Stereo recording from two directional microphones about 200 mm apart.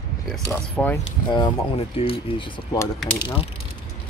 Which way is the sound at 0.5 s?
10° left (ahead or behind).